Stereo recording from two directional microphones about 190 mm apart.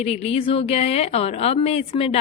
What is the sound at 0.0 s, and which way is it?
A woman's voice, 35° left (ahead or behind).